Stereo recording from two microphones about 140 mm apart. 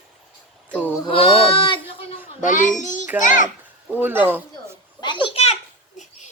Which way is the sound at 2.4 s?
65° left (ahead or behind).